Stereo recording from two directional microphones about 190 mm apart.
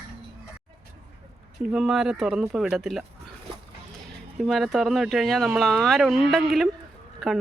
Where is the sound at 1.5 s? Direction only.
Centre (ahead or behind).